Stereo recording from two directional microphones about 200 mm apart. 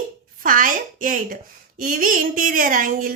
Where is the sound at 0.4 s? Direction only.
40° right (ahead or behind).